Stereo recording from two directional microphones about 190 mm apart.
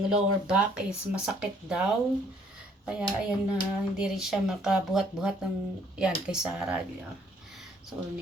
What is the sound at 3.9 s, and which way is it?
Speech, 5° right (ahead or behind).